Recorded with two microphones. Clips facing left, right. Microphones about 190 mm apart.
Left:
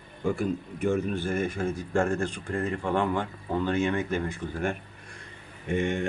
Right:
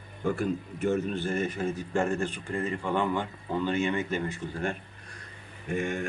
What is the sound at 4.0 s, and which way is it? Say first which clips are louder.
Speech: left 1 dB; 15° left (ahead or behind).